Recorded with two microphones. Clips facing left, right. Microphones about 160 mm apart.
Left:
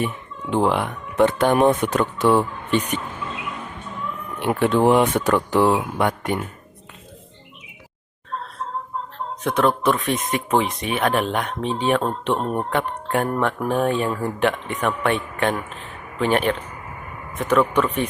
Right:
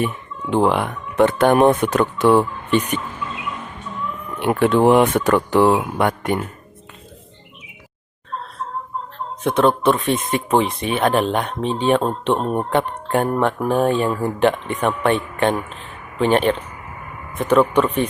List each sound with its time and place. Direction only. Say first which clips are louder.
0.5 s speech: right 3 dB; 60° right (ahead or behind)
4.4 s speech: right 3 dB; 60° right (ahead or behind)
9.4 s speech: right 3 dB; 25° right (ahead or behind)